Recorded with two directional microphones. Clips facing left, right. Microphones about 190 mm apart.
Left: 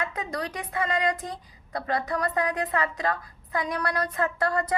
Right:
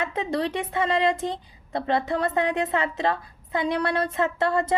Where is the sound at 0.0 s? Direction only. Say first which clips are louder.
Right 5 dB; 25° right (ahead or behind).